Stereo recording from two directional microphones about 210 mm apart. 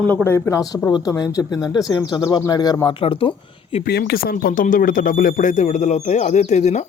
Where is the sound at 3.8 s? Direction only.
45° left (ahead or behind).